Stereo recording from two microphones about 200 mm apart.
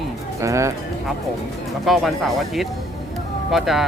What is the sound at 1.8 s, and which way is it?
Speech, centre (ahead or behind).